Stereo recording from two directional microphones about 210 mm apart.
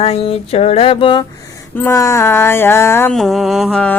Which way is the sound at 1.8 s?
15° left (ahead or behind).